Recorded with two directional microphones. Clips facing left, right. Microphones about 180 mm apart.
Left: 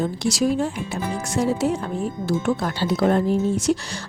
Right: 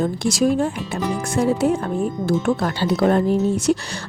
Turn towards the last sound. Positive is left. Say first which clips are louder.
# right 2 dB
turn(degrees=-65)  # may be behind; listen again after turning